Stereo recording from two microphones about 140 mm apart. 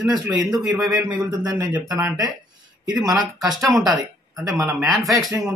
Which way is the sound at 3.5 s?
Centre (ahead or behind).